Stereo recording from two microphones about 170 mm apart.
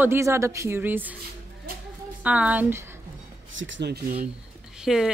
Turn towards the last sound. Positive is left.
turn(degrees=-5)  # may be behind; listen again after turning